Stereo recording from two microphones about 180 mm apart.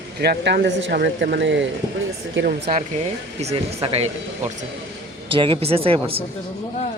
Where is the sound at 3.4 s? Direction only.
35° right (ahead or behind).